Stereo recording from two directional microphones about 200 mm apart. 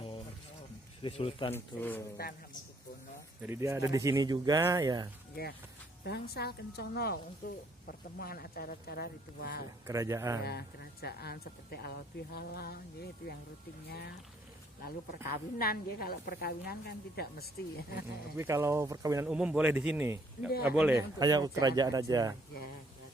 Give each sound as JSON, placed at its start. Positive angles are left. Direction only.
{"t": 1.0, "sound": "speech", "side_deg": 25}
{"t": 1.5, "sound": "a man's voice", "side_deg": 10}
{"t": 3.4, "sound": "speech", "side_deg": -15}
{"t": 5.3, "sound": "speech", "side_deg": 50}
{"t": 9.8, "sound": "speech", "side_deg": -15}
{"t": 11.0, "sound": "speech", "side_deg": 50}
{"t": 15.6, "sound": "speech", "side_deg": 50}
{"t": 18.3, "sound": "speech", "side_deg": -15}
{"t": 19.3, "sound": "a man's voice", "side_deg": -5}
{"t": 21.2, "sound": "speech", "side_deg": -20}